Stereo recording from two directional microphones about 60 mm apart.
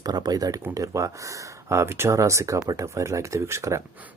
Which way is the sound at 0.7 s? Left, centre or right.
Right.